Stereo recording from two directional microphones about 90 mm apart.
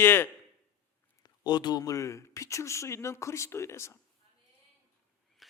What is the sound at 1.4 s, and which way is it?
Speech, 55° left (ahead or behind).